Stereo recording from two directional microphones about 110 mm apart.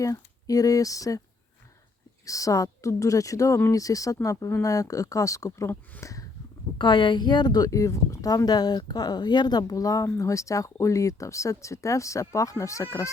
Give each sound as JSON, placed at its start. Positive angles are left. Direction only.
{"t": 0.0, "sound": "speech", "side_deg": 30}
{"t": 2.2, "sound": "speech", "side_deg": 30}
{"t": 6.7, "sound": "speech", "side_deg": 45}